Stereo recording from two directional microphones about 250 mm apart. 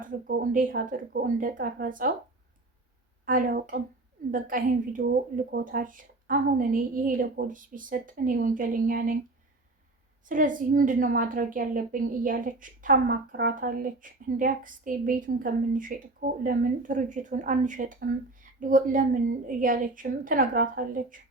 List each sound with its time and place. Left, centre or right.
0.0 s a woman's voice: right
3.2 s a woman's voice: right
10.2 s a woman's voice: right